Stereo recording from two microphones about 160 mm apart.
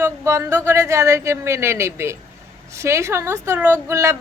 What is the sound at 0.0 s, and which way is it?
A woman's voice, 15° right (ahead or behind).